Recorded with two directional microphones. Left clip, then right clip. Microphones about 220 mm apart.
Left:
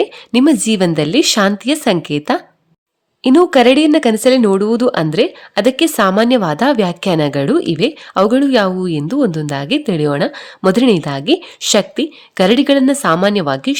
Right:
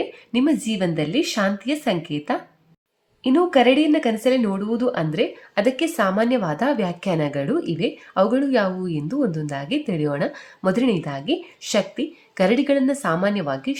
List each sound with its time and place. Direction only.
0.3 s speech: 45° left (ahead or behind)